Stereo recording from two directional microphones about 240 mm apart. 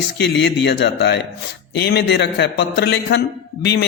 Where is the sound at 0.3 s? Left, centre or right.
Left.